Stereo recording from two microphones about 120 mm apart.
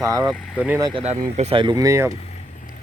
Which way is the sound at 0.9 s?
65° right (ahead or behind).